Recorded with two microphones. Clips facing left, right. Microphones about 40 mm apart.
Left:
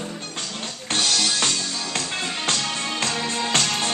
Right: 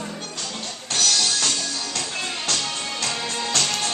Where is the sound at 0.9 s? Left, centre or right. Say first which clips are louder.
Even; left.